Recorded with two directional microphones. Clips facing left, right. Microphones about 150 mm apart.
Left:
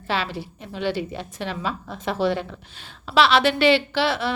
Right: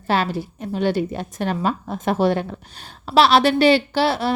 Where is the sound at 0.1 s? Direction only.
45° right (ahead or behind).